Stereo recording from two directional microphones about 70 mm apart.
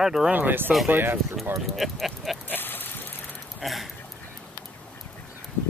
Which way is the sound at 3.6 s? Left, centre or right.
Centre.